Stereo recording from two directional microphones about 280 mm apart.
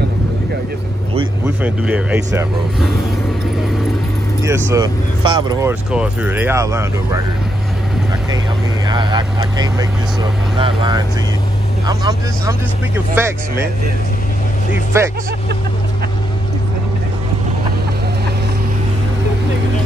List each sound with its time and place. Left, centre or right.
1.6 s speech: centre
4.4 s speech: centre
8.8 s speech: centre
14.9 s speech: centre